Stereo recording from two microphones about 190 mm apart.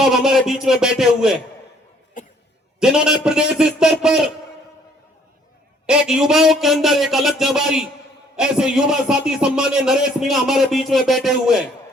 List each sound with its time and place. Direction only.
0.0 s speech: centre (ahead or behind)
2.2 s cough: 45° left (ahead or behind)
2.8 s speech: 5° right (ahead or behind)
5.8 s speech: 5° right (ahead or behind)